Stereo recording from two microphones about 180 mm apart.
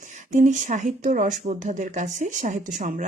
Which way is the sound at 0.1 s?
45° right (ahead or behind).